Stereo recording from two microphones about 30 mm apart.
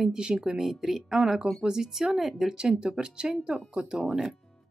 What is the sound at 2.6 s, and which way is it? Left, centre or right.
Speech, right.